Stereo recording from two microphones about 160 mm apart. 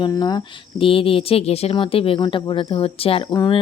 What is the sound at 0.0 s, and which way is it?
Speech, 25° left (ahead or behind).